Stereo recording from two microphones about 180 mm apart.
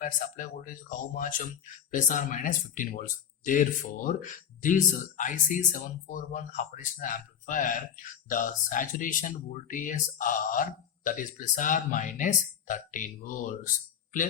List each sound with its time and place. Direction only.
0.0 s speech: 50° left (ahead or behind)